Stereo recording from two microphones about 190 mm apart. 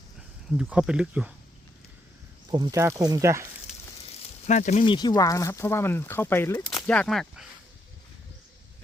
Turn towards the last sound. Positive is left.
turn(degrees=0)  # may be behind; listen again after turning